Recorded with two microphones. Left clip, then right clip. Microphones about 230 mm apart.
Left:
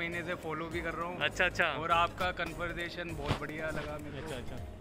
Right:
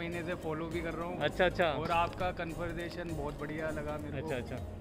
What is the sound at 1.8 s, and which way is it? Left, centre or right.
Speech, centre.